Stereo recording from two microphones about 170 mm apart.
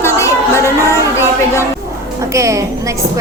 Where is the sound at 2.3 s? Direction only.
20° right (ahead or behind).